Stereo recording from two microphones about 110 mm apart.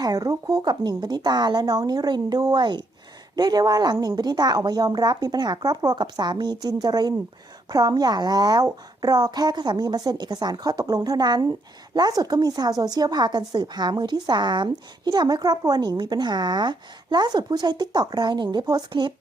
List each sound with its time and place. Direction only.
0.0 s a woman's voice: 35° right (ahead or behind)